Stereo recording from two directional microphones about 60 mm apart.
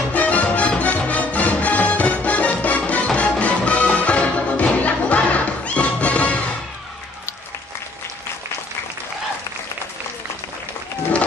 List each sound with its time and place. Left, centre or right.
0.1 s music: left